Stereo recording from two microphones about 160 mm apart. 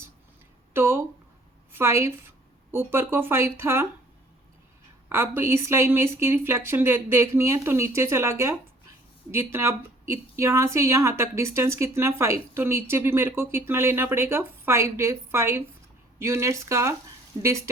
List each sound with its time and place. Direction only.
0.7 s a woman's voice: 15° right (ahead or behind)
5.0 s a woman's voice: 15° right (ahead or behind)